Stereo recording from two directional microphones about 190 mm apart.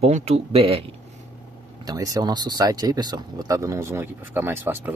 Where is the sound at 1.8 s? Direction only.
20° right (ahead or behind).